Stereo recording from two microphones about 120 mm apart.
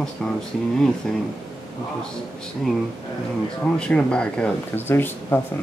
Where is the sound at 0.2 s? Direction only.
5° left (ahead or behind).